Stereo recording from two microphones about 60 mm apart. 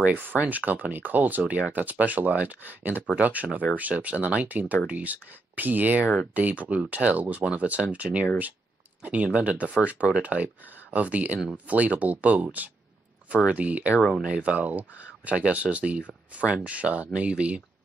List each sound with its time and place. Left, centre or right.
0.0 s speech: right